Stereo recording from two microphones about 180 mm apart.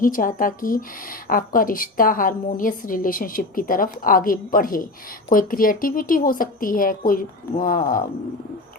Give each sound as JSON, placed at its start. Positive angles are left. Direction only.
{"t": 0.0, "sound": "a woman's voice", "side_deg": 50}